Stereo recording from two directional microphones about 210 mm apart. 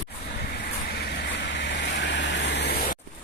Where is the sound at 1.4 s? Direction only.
55° left (ahead or behind).